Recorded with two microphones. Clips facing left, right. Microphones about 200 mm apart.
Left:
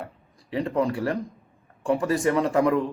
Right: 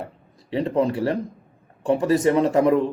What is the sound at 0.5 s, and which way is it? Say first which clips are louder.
A man's voice: right 3 dB; 25° right (ahead or behind).